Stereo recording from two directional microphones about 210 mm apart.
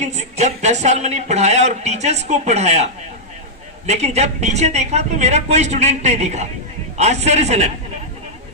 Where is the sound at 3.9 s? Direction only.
30° right (ahead or behind).